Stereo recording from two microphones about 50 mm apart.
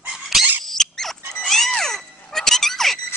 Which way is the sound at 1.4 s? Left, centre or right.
Centre.